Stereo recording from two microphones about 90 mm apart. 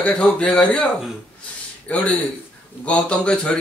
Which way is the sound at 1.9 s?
15° left (ahead or behind).